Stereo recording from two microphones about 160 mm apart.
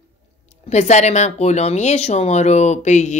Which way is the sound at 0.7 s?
45° left (ahead or behind).